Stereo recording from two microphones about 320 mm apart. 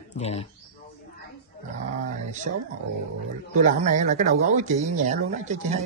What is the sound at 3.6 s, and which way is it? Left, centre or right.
Speech, right.